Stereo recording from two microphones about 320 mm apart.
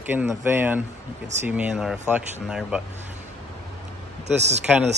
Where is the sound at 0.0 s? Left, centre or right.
Centre.